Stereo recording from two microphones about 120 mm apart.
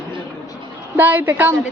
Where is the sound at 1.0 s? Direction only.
15° right (ahead or behind).